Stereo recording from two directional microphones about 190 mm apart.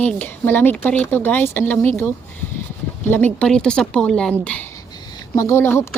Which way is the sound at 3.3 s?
5° left (ahead or behind).